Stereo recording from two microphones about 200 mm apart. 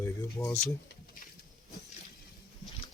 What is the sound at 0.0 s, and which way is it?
Speech, 15° left (ahead or behind).